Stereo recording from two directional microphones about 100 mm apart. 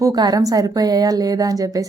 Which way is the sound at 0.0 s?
40° right (ahead or behind).